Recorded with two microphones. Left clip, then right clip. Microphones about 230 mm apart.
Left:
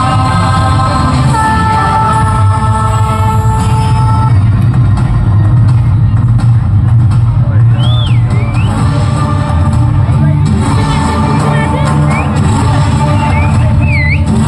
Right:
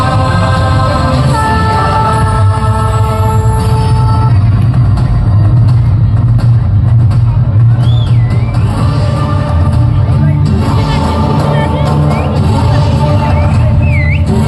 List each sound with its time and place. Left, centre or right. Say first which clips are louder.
0.0 s music: left 1 dB; right
10.7 s music: left 1 dB; right